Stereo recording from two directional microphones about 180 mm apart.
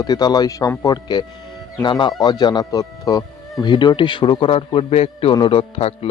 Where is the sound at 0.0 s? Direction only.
20° left (ahead or behind).